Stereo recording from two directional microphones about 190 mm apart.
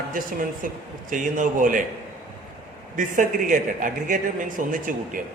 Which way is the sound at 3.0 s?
45° right (ahead or behind).